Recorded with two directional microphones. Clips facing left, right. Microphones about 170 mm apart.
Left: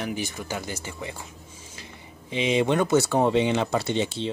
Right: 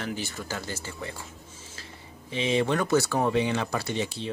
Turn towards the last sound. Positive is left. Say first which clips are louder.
# left 4 dB
turn(degrees=25)  # may be behind; listen again after turning